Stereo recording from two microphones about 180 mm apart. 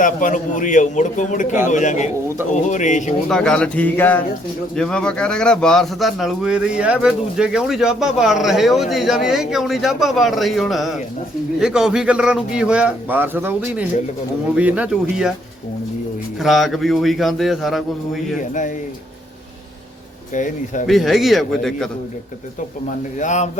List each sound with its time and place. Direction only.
0.0 s a man's voice: 45° left (ahead or behind)
3.2 s speech: 5° left (ahead or behind)
16.4 s speech: centre (ahead or behind)
18.3 s a man's voice: 45° left (ahead or behind)
20.3 s a man's voice: 45° left (ahead or behind)
20.8 s speech: centre (ahead or behind)
23.1 s a man's voice: 40° left (ahead or behind)